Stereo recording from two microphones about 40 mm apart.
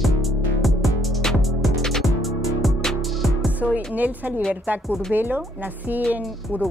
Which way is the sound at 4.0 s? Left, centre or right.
Right.